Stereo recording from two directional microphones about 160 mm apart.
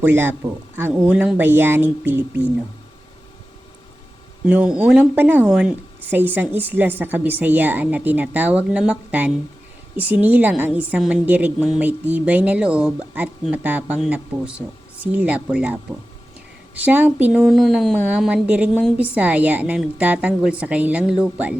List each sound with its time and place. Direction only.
0.0 s a woman's voice: 15° right (ahead or behind)
4.4 s a woman's voice: 10° right (ahead or behind)